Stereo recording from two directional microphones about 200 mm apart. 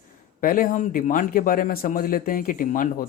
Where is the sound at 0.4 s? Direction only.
45° left (ahead or behind).